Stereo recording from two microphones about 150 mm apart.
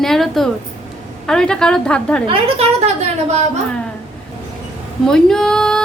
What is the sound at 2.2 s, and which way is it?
A woman's voice, 40° right (ahead or behind).